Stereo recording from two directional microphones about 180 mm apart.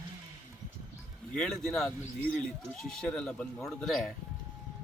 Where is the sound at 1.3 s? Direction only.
Centre (ahead or behind).